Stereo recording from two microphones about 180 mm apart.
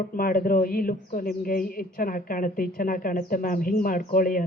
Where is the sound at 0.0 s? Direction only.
50° left (ahead or behind).